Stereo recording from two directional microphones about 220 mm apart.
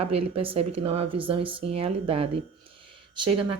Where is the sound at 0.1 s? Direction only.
25° right (ahead or behind).